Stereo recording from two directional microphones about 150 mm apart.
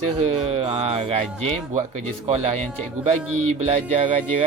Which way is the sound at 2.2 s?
45° right (ahead or behind).